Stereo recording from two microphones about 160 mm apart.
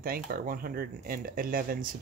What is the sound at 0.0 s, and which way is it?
Speech, 65° right (ahead or behind).